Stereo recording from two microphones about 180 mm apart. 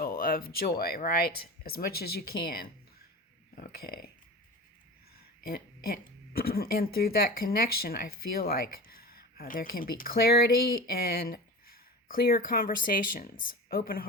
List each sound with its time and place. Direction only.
0.0 s speech: 55° left (ahead or behind)
5.4 s speech: 55° left (ahead or behind)